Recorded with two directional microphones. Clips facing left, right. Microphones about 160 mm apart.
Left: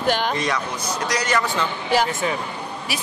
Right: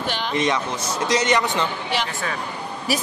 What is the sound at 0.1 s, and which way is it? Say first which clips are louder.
Speech: left 6 dB; 45° left (ahead or behind).